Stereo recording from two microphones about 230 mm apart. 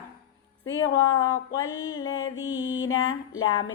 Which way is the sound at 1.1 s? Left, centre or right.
Left.